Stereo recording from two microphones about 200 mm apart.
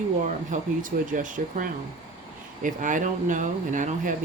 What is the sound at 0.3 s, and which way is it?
Speech, 40° right (ahead or behind).